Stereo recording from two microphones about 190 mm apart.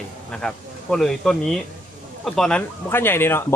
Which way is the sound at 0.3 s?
5° left (ahead or behind).